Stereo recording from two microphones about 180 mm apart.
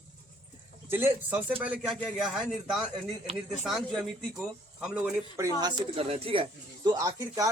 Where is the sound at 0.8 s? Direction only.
10° right (ahead or behind).